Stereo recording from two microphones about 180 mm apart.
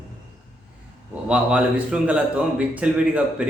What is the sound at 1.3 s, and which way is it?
A man's voice, 5° right (ahead or behind).